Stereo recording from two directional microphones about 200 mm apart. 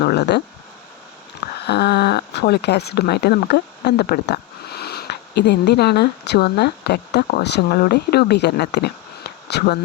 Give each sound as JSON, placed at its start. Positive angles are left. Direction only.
{"t": 0.0, "sound": "speech", "side_deg": 50}
{"t": 1.6, "sound": "speech", "side_deg": 55}